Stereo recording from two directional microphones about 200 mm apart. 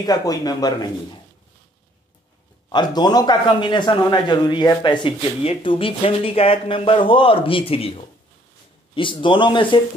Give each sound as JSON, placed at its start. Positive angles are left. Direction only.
{"t": 0.0, "sound": "a man's voice", "side_deg": 20}
{"t": 2.7, "sound": "a man's voice", "side_deg": 20}